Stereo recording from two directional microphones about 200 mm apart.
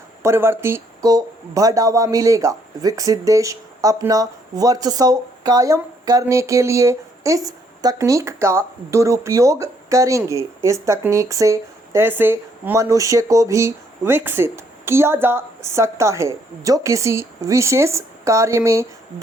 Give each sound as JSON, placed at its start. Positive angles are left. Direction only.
{"t": 0.2, "sound": "speech", "side_deg": -10}